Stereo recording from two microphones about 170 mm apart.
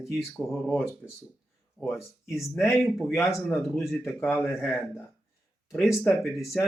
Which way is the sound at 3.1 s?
15° left (ahead or behind).